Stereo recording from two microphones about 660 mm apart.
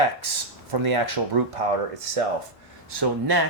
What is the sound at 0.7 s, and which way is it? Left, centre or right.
Speech, right.